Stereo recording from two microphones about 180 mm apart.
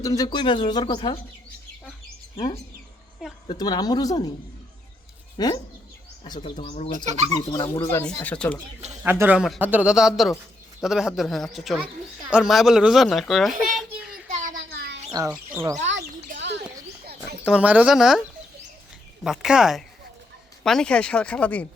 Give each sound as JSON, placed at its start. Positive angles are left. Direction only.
{"t": 0.0, "sound": "speech", "side_deg": 20}
{"t": 3.4, "sound": "speech", "side_deg": 25}
{"t": 5.4, "sound": "speech", "side_deg": 25}
{"t": 8.0, "sound": "speech", "side_deg": 5}
{"t": 9.0, "sound": "a child's voice", "side_deg": -10}
{"t": 14.3, "sound": "a sound", "side_deg": -45}
{"t": 15.3, "sound": "speech", "side_deg": -10}
{"t": 17.4, "sound": "a child's voice", "side_deg": -5}
{"t": 19.2, "sound": "a child's voice", "side_deg": -5}